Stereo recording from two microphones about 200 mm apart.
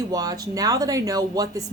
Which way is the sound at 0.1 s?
20° right (ahead or behind).